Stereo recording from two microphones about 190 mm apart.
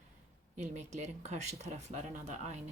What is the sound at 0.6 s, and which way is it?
Speech, 35° right (ahead or behind).